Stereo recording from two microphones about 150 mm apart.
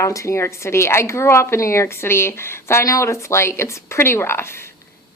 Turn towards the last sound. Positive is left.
turn(degrees=15)  # may be behind; listen again after turning